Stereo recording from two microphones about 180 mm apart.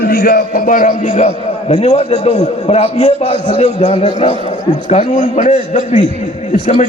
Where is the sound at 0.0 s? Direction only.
60° left (ahead or behind); by 5.5 s 40° left (ahead or behind).